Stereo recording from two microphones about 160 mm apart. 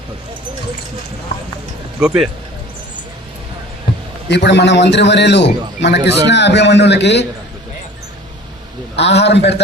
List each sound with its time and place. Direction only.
1.3 s a man's voice: 90° left
2.0 s speech: 5° right (ahead or behind)
4.3 s a man's voice: 90° left
9.0 s a man's voice: 90° left